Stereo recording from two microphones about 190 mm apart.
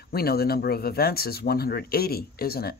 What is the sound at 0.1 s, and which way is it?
Speech, 55° left (ahead or behind).